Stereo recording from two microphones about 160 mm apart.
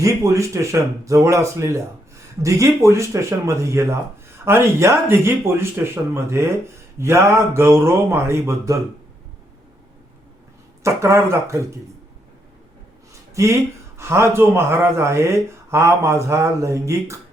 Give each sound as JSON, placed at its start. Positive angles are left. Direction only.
{"t": 0.0, "sound": "speech", "side_deg": -20}
{"t": 10.8, "sound": "speech", "side_deg": -15}
{"t": 13.3, "sound": "speech", "side_deg": -20}